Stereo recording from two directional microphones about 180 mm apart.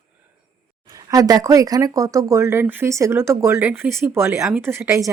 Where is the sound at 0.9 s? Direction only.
20° right (ahead or behind).